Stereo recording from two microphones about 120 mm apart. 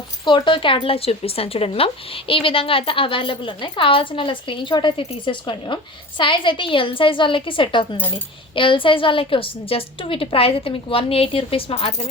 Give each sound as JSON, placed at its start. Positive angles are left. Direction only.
{"t": 0.3, "sound": "speech", "side_deg": 40}